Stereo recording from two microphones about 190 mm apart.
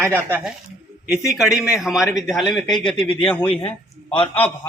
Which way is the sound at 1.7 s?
Centre (ahead or behind).